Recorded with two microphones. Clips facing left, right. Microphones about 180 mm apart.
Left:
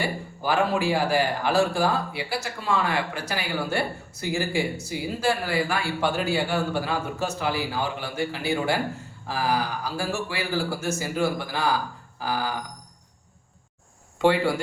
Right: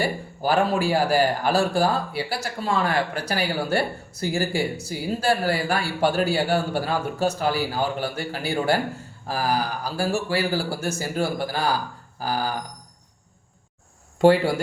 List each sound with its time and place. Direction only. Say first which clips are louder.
0.0 s a man's voice: right 3 dB; 35° right (ahead or behind)
14.2 s a man's voice: right 4 dB; 40° right (ahead or behind)